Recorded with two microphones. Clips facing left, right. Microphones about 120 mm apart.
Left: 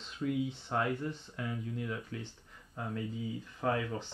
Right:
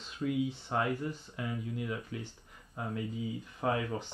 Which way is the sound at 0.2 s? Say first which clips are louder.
Right 1 dB; 5° right (ahead or behind).